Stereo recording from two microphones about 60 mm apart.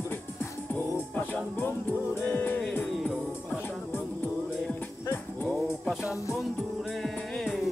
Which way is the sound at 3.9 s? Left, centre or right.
Left.